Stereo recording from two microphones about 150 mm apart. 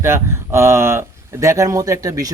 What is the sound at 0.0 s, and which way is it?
Speech, 15° right (ahead or behind).